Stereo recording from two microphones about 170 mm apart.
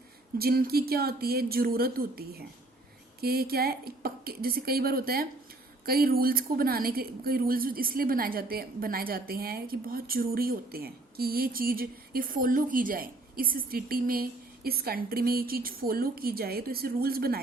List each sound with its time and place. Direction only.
0.3 s a woman's voice: 65° right (ahead or behind)